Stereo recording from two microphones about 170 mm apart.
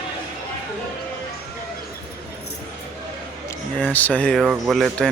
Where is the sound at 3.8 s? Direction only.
10° left (ahead or behind).